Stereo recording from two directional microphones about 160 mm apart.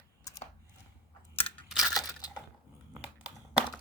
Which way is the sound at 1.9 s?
25° left (ahead or behind).